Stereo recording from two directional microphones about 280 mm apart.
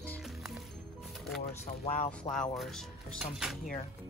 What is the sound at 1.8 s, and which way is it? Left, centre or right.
Speech, left.